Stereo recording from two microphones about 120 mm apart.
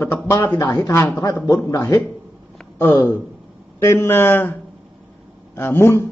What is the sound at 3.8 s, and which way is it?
Speech, 20° left (ahead or behind).